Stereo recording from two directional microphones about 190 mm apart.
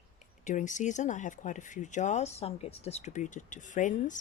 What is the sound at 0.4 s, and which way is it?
Speech, 40° left (ahead or behind).